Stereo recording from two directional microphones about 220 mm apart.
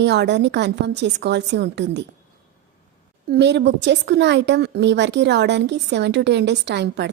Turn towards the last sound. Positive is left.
turn(degrees=-50)  # may be behind; listen again after turning